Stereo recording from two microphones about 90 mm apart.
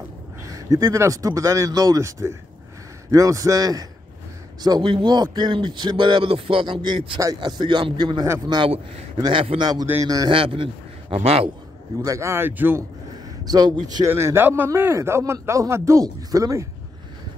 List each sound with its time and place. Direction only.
0.5 s a man's voice: 40° right (ahead or behind); by 7.2 s 70° right (ahead or behind)
7.3 s speech: 55° right (ahead or behind)
8.6 s speech: 90° right
9.3 s a man's voice: 75° right (ahead or behind)
9.6 s a man's voice: 50° right (ahead or behind)
10.3 s speech: 90° right
12.0 s a man's voice: 35° right (ahead or behind)
13.1 s a sound: 50° right (ahead or behind)
14.0 s a man's voice: 30° right (ahead or behind)